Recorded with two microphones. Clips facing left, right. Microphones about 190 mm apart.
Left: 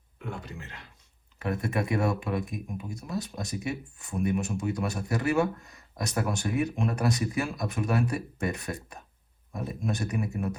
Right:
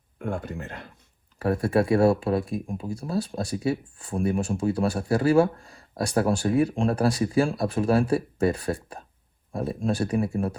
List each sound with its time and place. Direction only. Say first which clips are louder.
0.2 s speech: right 8 dB; 50° right (ahead or behind)
1.6 s speech: right 8 dB; 30° right (ahead or behind)